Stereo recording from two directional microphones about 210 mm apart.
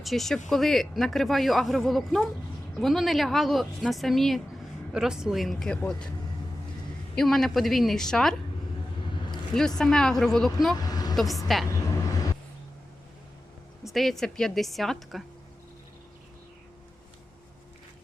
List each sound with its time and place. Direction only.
0.0 s speech: centre (ahead or behind)
7.2 s speech: centre (ahead or behind)
9.6 s speech: centre (ahead or behind)
10.8 s vehicle: 20° left (ahead or behind)
11.5 s speech: centre (ahead or behind)
13.8 s speech: centre (ahead or behind)